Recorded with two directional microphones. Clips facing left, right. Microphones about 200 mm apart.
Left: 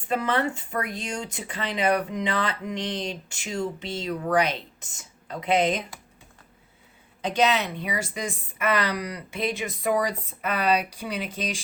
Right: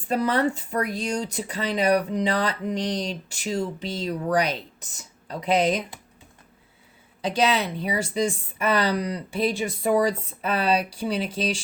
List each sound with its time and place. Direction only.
0.1 s speech: 40° right (ahead or behind)
7.3 s speech: 35° right (ahead or behind)